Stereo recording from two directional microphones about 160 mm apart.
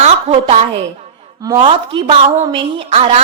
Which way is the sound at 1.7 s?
30° right (ahead or behind).